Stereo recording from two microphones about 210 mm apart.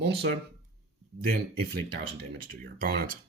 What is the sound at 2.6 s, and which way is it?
Speech, 45° right (ahead or behind).